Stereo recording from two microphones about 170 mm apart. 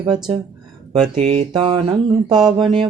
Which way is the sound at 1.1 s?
35° right (ahead or behind).